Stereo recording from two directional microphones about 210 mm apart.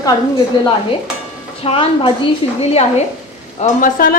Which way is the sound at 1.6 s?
25° left (ahead or behind).